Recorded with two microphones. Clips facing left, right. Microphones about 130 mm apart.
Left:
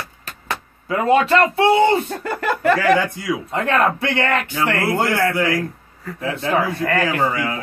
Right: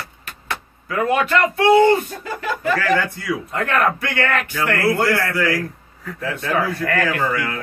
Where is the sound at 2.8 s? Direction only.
15° left (ahead or behind).